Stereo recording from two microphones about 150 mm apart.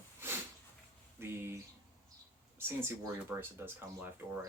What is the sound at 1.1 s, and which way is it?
Speech, 15° right (ahead or behind).